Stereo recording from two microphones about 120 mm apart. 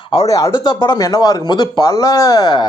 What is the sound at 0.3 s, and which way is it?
Speech, 25° left (ahead or behind).